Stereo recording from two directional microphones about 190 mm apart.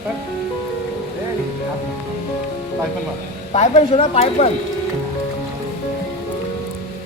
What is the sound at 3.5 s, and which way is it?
Speech, 35° left (ahead or behind).